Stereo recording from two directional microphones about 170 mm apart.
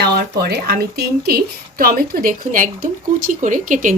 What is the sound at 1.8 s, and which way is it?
Speech, 60° right (ahead or behind).